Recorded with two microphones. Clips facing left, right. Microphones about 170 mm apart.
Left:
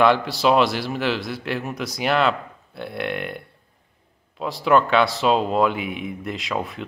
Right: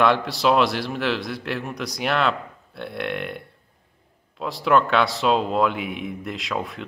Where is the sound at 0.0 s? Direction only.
Centre (ahead or behind).